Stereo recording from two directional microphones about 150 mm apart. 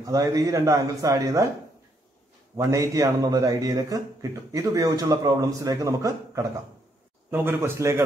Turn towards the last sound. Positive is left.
turn(degrees=-15)  # may be behind; listen again after turning